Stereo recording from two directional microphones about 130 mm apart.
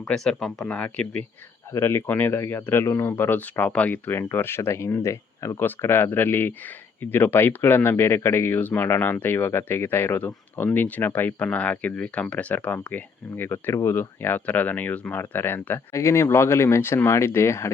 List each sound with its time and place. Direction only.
0.1 s speech: 5° left (ahead or behind); by 17.7 s 20° left (ahead or behind)